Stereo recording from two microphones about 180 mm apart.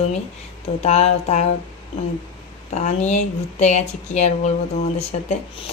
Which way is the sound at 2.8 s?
40° left (ahead or behind).